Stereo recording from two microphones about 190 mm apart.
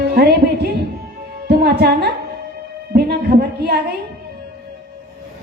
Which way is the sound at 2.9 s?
55° right (ahead or behind).